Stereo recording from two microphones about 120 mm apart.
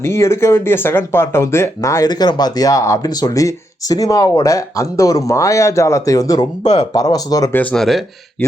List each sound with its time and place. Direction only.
0.0 s speech: 20° left (ahead or behind)
6.6 s speech: 75° left (ahead or behind)
6.9 s speech: 30° left (ahead or behind)
7.5 s speech: 15° left (ahead or behind)
7.8 s speech: centre (ahead or behind)
8.4 s speech: 15° left (ahead or behind)